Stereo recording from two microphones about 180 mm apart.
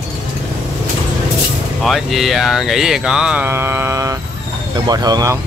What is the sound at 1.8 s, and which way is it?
Speech, centre (ahead or behind).